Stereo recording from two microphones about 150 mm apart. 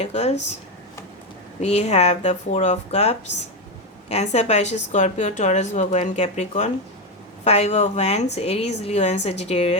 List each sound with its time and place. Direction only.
0.0 s speech: 50° left (ahead or behind)
1.6 s speech: 45° left (ahead or behind)